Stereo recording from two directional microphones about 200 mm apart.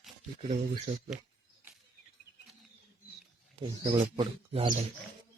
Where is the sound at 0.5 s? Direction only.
35° right (ahead or behind).